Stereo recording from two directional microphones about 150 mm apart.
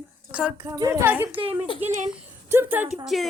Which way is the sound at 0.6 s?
20° right (ahead or behind).